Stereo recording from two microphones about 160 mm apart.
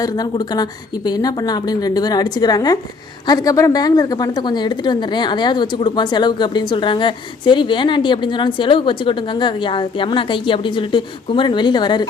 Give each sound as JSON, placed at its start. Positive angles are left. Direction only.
{"t": 0.0, "sound": "a woman's voice", "side_deg": 25}